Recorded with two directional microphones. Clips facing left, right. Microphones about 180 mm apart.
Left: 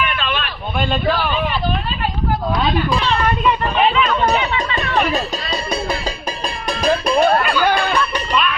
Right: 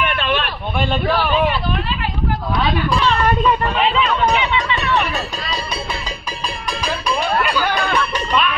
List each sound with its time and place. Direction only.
4.5 s speech: 45° left (ahead or behind)
6.8 s music: 45° left (ahead or behind)